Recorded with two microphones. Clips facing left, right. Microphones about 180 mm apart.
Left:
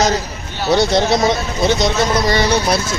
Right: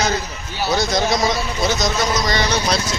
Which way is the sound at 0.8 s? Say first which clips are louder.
Left 5 dB; 30° left (ahead or behind).